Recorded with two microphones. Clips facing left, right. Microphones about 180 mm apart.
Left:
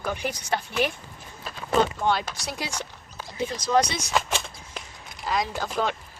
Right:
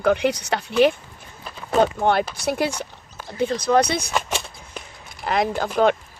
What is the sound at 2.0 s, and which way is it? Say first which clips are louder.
Speech: right 5 dB; 60° right (ahead or behind).